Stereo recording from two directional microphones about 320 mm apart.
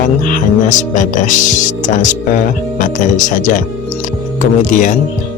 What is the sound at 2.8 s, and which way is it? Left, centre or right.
Speech, left.